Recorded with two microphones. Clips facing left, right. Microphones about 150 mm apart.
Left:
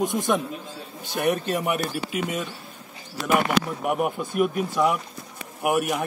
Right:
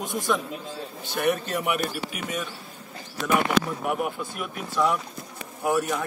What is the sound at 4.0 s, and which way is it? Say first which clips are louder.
Speech: left 7 dB; 15° left (ahead or behind).